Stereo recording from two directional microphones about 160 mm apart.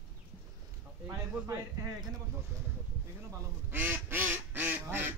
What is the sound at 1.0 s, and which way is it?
Speech, 20° right (ahead or behind).